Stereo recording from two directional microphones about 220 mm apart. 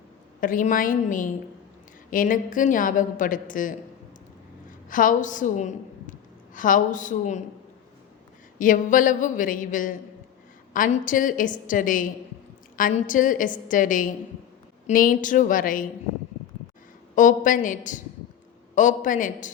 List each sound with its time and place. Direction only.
0.3 s a woman's voice: 40° left (ahead or behind)
4.9 s a woman's voice: 35° left (ahead or behind)
8.5 s a woman's voice: 35° left (ahead or behind)
17.2 s a woman's voice: 35° left (ahead or behind)